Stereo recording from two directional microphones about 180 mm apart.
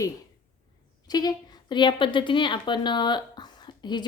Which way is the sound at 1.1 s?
20° left (ahead or behind).